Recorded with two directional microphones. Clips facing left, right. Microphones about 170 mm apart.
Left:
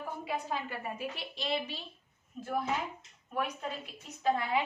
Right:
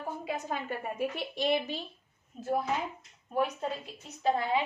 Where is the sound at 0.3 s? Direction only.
45° right (ahead or behind).